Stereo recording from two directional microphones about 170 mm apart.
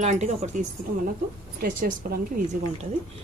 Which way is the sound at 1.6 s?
55° right (ahead or behind).